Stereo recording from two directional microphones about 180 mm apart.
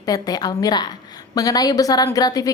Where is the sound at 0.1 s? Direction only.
20° left (ahead or behind).